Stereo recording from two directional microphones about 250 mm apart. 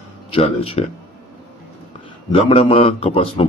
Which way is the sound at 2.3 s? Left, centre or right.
Left.